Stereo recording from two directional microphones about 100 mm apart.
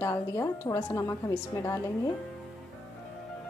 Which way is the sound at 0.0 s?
30° left (ahead or behind).